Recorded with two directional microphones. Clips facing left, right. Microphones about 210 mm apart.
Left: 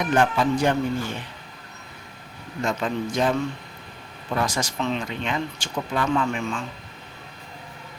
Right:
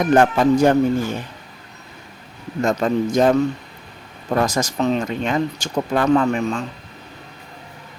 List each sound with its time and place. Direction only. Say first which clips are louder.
0.0 s speech: right 6 dB; 45° right (ahead or behind)
2.6 s speech: right 7 dB; 40° right (ahead or behind)